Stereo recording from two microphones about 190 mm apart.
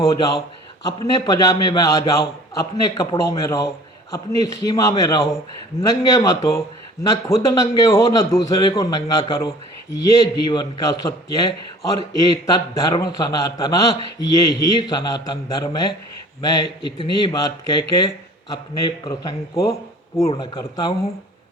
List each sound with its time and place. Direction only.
0.0 s a man's voice: 20° left (ahead or behind)